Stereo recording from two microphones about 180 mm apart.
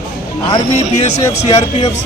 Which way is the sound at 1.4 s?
35° left (ahead or behind).